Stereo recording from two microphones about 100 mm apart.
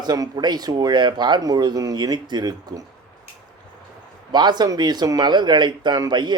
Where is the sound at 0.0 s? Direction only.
45° right (ahead or behind).